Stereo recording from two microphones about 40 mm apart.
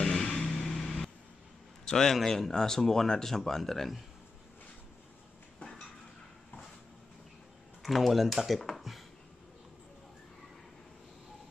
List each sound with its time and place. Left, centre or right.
0.0 s vehicle: centre
1.9 s a man's voice: centre
5.6 s dishes: left
7.8 s speech: centre